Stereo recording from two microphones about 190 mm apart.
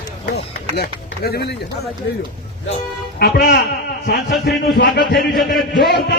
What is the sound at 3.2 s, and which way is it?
A man's voice, 55° left (ahead or behind).